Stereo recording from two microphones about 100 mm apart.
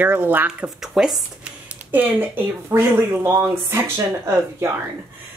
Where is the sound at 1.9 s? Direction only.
20° right (ahead or behind).